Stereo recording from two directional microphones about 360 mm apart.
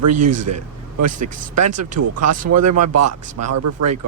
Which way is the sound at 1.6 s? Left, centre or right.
Right.